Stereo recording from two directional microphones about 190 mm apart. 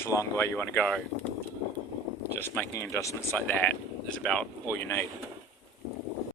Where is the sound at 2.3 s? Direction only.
10° left (ahead or behind).